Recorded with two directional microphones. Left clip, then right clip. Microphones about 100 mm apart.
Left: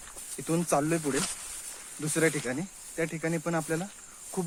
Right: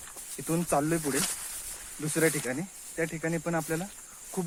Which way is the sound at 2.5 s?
20° left (ahead or behind).